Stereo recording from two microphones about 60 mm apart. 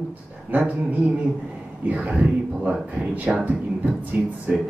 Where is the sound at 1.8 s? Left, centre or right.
Right.